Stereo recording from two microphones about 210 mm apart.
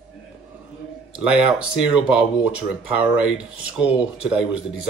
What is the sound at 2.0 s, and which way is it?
Speech, 5° right (ahead or behind).